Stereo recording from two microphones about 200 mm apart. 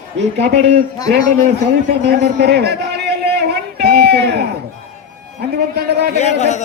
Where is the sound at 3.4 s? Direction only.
55° right (ahead or behind).